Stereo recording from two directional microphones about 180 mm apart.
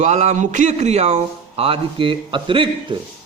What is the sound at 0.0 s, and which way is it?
A man's voice, 40° right (ahead or behind).